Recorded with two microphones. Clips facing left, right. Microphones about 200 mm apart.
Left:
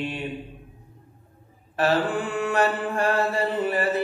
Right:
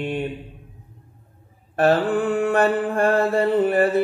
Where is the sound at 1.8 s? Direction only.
55° right (ahead or behind).